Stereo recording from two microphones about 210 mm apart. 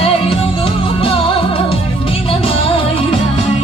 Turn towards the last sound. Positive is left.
turn(degrees=25)  # may be behind; listen again after turning